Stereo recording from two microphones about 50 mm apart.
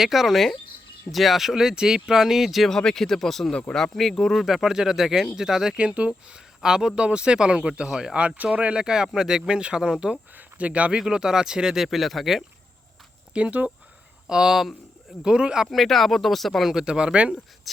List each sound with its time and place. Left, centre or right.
0.0 s speech: centre
2.7 s speech: centre
3.5 s speech: centre
3.9 s speech: centre
5.7 s speech: right
8.8 s speech: centre
11.0 s speech: centre
13.3 s speech: right
14.3 s speech: centre
15.6 s speech: centre
16.7 s speech: centre